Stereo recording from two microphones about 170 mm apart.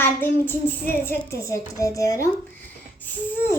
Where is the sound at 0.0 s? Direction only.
10° left (ahead or behind).